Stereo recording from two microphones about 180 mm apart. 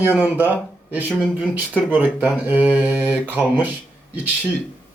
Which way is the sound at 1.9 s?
10° right (ahead or behind).